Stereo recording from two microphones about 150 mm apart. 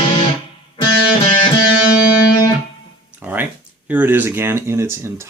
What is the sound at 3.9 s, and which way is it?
Speech, 10° right (ahead or behind).